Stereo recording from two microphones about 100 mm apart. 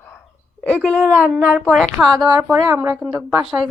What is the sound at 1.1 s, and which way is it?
A woman's voice, 10° right (ahead or behind).